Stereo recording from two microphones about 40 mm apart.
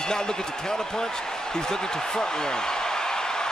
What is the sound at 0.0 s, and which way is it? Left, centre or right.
Basketball bounce, centre.